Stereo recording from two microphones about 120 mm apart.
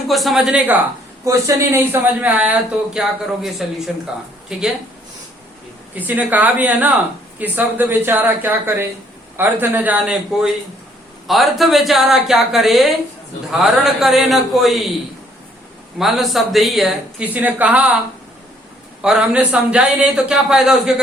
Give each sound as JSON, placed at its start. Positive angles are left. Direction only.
{"t": 0.1, "sound": "speech", "side_deg": 0}
{"t": 1.2, "sound": "a man's voice", "side_deg": -25}
{"t": 5.9, "sound": "a man's voice", "side_deg": -15}
{"t": 11.3, "sound": "speech", "side_deg": 0}
{"t": 16.0, "sound": "speech", "side_deg": 0}
{"t": 17.3, "sound": "a man's voice", "side_deg": -15}
{"t": 19.0, "sound": "a man's voice", "side_deg": -5}